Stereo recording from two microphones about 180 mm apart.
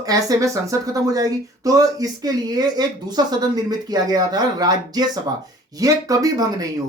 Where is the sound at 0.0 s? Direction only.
20° right (ahead or behind).